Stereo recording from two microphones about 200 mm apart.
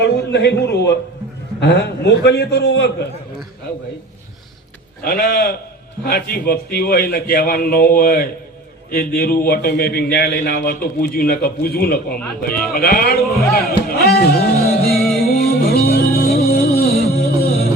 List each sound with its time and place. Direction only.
0.0 s a man's voice: 55° left (ahead or behind)
5.0 s a man's voice: 50° left (ahead or behind)
15.2 s music: 50° left (ahead or behind)